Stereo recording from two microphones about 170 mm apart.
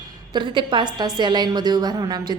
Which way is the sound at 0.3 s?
30° right (ahead or behind).